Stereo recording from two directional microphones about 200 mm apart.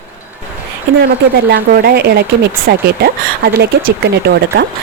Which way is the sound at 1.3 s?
50° right (ahead or behind).